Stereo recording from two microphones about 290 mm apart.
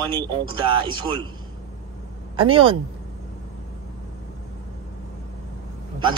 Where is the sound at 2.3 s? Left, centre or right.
Centre.